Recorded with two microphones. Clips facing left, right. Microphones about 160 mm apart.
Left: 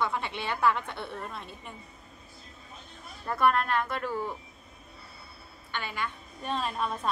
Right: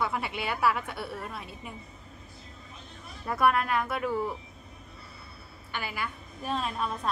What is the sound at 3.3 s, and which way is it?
A woman's voice, 5° right (ahead or behind).